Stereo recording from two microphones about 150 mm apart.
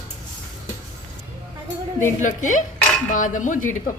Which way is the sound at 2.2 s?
60° left (ahead or behind).